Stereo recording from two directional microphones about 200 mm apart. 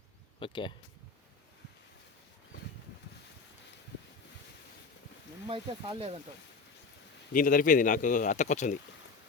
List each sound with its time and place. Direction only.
0.3 s speech: 25° left (ahead or behind)
5.5 s speech: 25° right (ahead or behind)
7.3 s speech: 45° left (ahead or behind)